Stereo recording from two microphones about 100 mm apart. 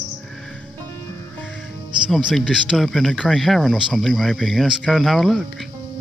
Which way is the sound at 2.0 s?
Centre (ahead or behind).